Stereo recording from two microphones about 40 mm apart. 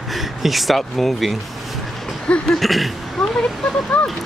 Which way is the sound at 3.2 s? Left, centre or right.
Centre.